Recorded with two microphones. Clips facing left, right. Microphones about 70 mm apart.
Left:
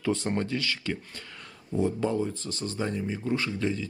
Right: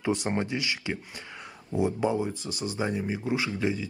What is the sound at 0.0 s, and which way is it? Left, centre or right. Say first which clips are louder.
Speech: even; centre.